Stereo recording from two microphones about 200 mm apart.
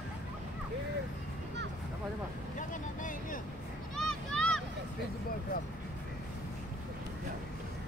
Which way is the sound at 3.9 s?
5° left (ahead or behind).